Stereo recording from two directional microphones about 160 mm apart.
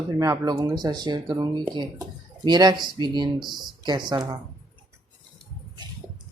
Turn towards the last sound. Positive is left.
turn(degrees=-25)  # may be behind; listen again after turning